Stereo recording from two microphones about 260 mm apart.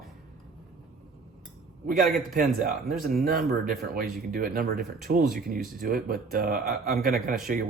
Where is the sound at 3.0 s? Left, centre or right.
Right.